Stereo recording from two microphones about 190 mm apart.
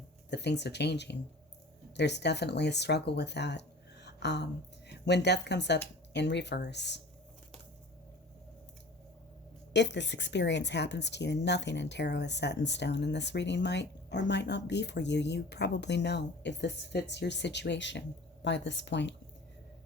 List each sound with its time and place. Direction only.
0.3 s a woman's voice: 65° left (ahead or behind)
4.0 s a sound: 65° left (ahead or behind)
4.9 s a woman's voice: 65° left (ahead or behind)
9.7 s a woman's voice: 65° left (ahead or behind)